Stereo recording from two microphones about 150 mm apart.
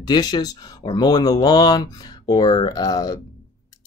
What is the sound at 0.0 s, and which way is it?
Speech, 25° left (ahead or behind).